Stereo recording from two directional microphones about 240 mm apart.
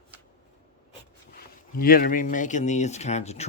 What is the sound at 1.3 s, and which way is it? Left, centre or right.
Speech, left.